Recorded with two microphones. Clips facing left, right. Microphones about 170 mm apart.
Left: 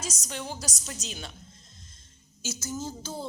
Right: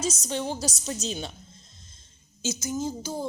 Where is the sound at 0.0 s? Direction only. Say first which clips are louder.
Right 8 dB; 25° right (ahead or behind).